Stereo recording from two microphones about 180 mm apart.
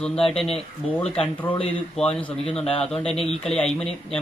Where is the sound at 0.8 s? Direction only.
35° left (ahead or behind).